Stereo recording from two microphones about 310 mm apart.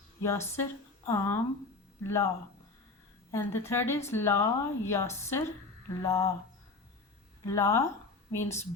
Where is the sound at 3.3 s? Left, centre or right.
Centre.